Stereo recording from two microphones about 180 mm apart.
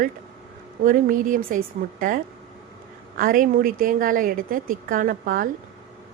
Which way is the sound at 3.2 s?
50° right (ahead or behind).